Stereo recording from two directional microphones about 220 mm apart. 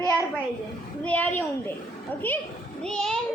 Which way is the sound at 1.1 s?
5° left (ahead or behind).